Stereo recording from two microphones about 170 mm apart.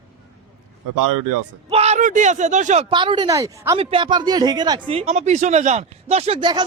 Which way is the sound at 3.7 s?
30° right (ahead or behind).